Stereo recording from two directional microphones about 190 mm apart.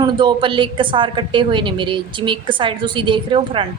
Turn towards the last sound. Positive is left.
turn(degrees=-25)  # may be behind; listen again after turning